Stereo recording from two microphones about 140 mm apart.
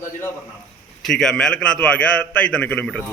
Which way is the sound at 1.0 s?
5° left (ahead or behind).